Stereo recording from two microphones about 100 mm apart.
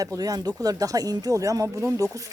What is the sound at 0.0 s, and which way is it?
Speech, 35° right (ahead or behind).